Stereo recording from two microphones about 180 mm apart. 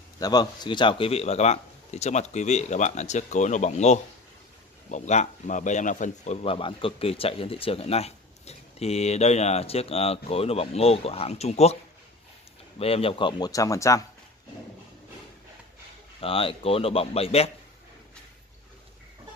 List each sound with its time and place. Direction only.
0.2 s a man's voice: 20° left (ahead or behind)
16.2 s speech: 30° left (ahead or behind)